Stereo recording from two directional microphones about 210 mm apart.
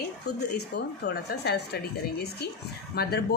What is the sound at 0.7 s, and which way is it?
A woman's voice, 55° left (ahead or behind).